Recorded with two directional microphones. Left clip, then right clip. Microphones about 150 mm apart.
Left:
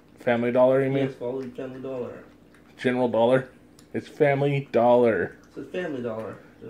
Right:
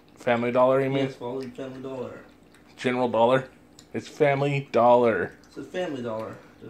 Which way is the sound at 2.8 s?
20° left (ahead or behind).